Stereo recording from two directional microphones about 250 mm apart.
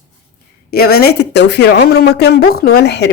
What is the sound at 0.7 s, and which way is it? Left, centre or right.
Speech, left.